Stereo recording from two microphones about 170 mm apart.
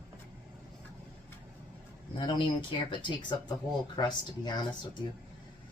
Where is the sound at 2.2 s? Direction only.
30° left (ahead or behind).